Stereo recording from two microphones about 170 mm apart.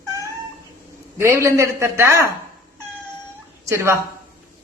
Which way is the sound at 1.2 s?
15° right (ahead or behind).